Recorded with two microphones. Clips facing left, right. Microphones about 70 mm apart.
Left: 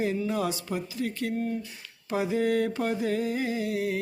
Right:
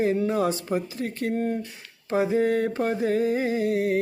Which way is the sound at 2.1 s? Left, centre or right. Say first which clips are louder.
Right 4 dB; right.